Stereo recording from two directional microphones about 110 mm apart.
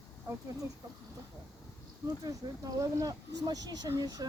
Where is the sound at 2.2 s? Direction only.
30° right (ahead or behind).